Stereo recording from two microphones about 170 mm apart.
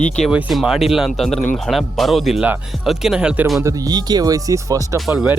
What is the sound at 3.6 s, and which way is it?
Speech, 25° right (ahead or behind).